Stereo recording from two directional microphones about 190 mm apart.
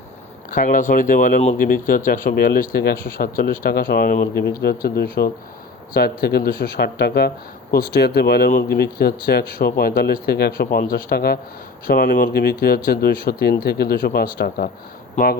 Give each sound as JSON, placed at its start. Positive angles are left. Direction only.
{"t": 0.5, "sound": "speech", "side_deg": 45}